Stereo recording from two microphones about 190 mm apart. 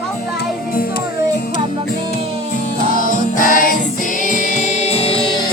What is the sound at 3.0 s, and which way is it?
Music, 45° left (ahead or behind).